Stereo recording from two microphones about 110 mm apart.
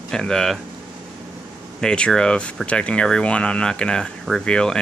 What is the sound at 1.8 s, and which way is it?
Speech, 5° left (ahead or behind).